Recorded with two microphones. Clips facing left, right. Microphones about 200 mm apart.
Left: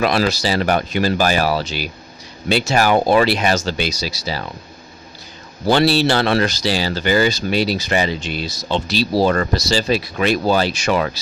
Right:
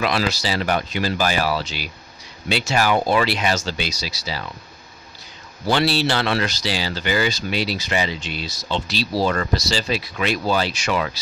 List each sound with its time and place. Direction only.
0.0 s speech: 45° left (ahead or behind)
5.7 s speech: 40° left (ahead or behind)